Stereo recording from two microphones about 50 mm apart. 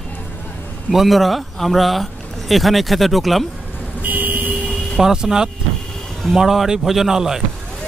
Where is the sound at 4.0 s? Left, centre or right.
Right.